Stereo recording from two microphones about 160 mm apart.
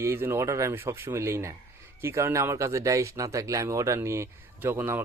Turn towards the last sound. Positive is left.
turn(degrees=-15)  # may be behind; listen again after turning